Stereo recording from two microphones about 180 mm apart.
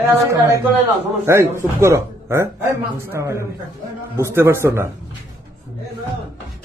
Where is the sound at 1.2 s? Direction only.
15° right (ahead or behind).